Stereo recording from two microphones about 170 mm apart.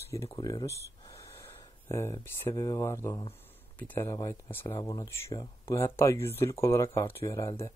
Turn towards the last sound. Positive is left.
turn(degrees=15)  # may be behind; listen again after turning